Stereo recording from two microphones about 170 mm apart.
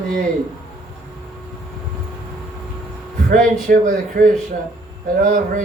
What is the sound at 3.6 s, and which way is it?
Speech, 55° right (ahead or behind).